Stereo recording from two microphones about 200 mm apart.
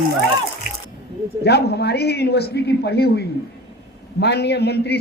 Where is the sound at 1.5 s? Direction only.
55° left (ahead or behind).